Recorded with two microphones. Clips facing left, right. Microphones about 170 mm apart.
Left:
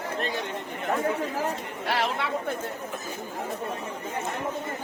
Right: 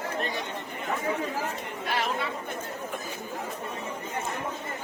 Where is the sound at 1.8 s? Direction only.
80° left.